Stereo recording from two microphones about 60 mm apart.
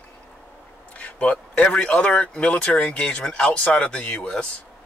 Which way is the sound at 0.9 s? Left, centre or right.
Left.